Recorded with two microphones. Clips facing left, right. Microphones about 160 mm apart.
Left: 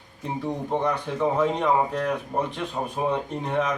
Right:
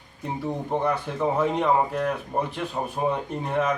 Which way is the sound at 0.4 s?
5° right (ahead or behind).